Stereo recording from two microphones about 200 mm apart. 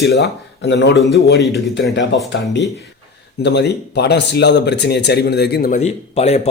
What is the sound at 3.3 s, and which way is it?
Speech, 60° left (ahead or behind).